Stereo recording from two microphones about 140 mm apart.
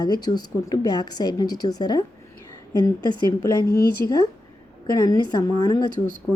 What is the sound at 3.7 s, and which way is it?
Speech, 90° left.